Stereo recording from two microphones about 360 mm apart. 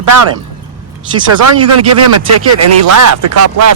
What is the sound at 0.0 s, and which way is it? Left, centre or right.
Speech, right.